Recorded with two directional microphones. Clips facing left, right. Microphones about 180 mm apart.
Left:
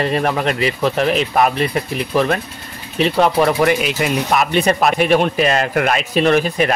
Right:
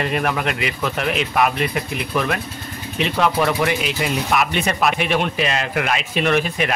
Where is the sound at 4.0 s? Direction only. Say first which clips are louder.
Left 4 dB; 55° left (ahead or behind).